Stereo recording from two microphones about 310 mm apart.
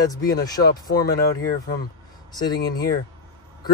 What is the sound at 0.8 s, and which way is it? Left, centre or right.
Speech, centre.